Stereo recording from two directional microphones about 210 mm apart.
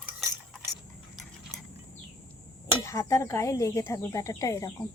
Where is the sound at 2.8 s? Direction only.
15° left (ahead or behind).